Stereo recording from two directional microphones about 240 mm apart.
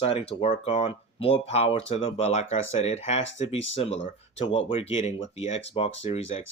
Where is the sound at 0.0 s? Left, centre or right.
Left.